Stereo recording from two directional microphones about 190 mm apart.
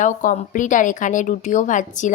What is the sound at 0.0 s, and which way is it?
A woman's voice, 45° left (ahead or behind).